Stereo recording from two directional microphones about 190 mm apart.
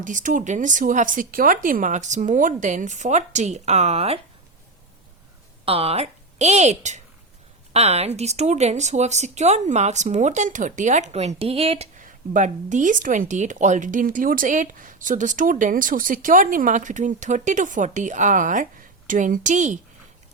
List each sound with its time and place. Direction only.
0.0 s speech: 40° right (ahead or behind)
5.6 s a woman's voice: 30° right (ahead or behind)